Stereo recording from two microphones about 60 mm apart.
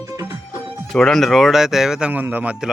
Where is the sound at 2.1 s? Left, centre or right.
Right.